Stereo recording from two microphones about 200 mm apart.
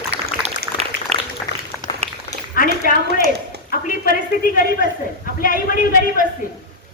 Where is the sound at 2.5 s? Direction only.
45° left (ahead or behind).